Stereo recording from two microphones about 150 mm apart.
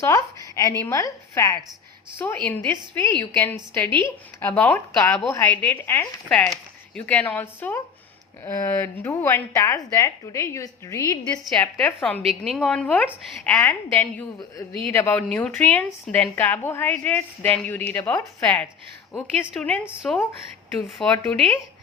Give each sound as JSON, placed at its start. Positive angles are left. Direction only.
{"t": 0.0, "sound": "a woman's voice", "side_deg": 20}
{"t": 11.2, "sound": "a woman's voice", "side_deg": 5}
{"t": 19.8, "sound": "speech", "side_deg": -5}